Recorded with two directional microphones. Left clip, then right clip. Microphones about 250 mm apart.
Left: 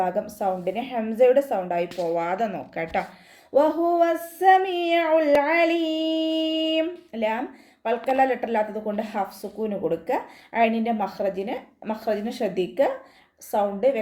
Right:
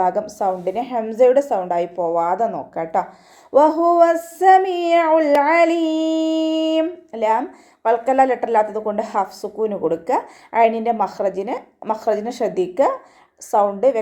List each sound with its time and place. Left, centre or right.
0.0 s a woman's voice: centre